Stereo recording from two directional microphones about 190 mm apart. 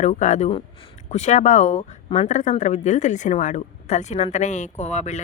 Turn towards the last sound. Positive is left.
turn(degrees=40)  # may be behind; listen again after turning